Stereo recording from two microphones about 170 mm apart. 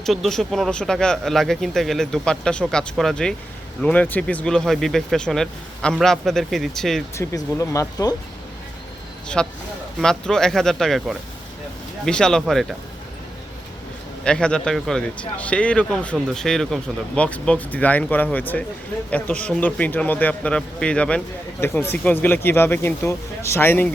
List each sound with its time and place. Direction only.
0.0 s speech: centre (ahead or behind)
7.2 s speech: 15° left (ahead or behind)
9.2 s speech: 5° left (ahead or behind)
14.3 s speech: 5° left (ahead or behind)